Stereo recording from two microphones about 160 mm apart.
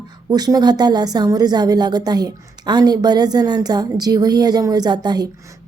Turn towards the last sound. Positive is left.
turn(degrees=-25)  # may be behind; listen again after turning